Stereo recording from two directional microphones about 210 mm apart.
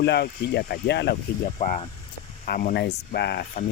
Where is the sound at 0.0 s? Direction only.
50° left (ahead or behind).